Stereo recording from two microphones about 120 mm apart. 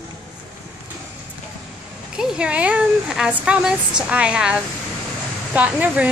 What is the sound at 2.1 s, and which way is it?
Speech, 10° right (ahead or behind).